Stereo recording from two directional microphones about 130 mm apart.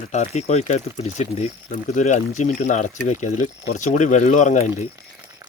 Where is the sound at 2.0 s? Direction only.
65° left (ahead or behind).